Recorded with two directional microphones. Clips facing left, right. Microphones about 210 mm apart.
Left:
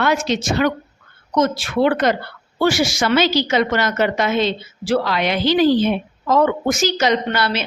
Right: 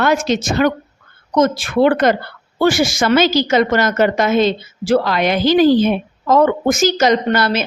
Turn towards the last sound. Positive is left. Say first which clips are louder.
# right 4 dB
turn(degrees=-45)  # may be behind; listen again after turning